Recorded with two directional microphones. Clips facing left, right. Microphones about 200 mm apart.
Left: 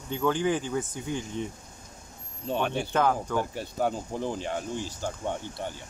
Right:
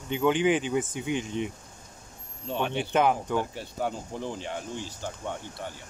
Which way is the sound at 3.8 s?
45° left (ahead or behind).